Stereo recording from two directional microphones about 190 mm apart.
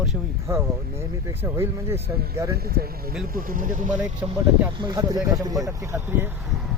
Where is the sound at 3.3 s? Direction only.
45° right (ahead or behind).